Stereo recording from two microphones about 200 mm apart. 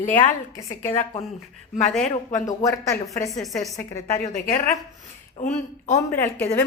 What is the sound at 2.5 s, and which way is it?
Speech, 15° left (ahead or behind).